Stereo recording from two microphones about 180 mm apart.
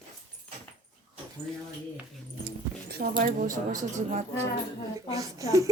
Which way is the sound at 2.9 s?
60° right (ahead or behind).